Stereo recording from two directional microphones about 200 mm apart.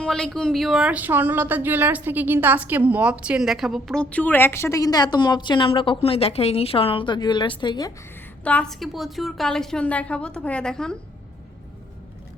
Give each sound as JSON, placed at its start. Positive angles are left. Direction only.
{"t": 0.0, "sound": "speech", "side_deg": 5}
{"t": 8.4, "sound": "speech", "side_deg": 5}